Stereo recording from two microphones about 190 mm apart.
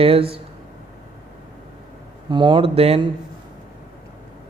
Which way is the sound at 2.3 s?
25° right (ahead or behind).